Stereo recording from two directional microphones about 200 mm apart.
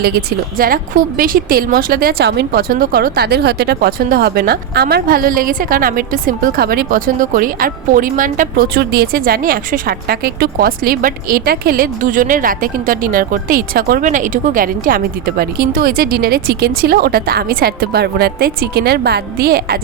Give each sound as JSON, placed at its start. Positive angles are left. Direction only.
{"t": 0.6, "sound": "a woman's voice", "side_deg": -45}